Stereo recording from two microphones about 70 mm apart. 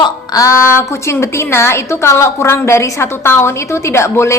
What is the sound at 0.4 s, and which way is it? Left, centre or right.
A woman's voice, left.